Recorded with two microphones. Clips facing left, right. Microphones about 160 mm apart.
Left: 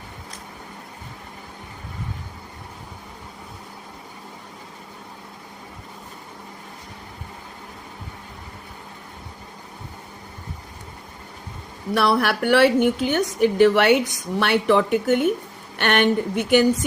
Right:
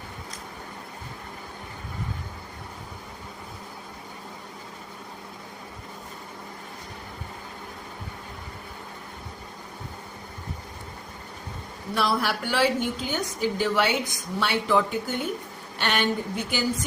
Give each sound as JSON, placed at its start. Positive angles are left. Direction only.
{"t": 11.9, "sound": "a woman's voice", "side_deg": 65}